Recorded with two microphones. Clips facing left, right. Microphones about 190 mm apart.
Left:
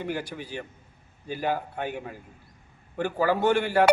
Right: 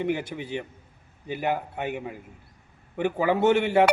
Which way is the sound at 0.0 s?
20° right (ahead or behind).